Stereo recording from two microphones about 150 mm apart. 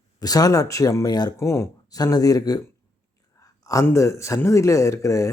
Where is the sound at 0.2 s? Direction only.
25° left (ahead or behind).